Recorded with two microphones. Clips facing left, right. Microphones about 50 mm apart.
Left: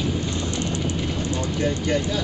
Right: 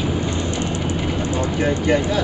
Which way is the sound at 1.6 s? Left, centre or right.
Right.